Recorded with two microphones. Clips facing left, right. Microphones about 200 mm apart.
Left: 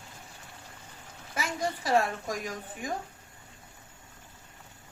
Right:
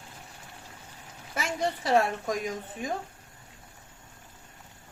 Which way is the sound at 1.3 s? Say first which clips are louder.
Right 2 dB; 25° right (ahead or behind).